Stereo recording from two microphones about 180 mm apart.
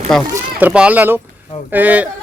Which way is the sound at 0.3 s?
10° right (ahead or behind).